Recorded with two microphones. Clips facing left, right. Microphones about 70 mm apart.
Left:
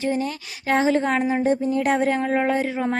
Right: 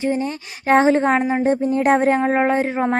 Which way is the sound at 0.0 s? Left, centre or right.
Right.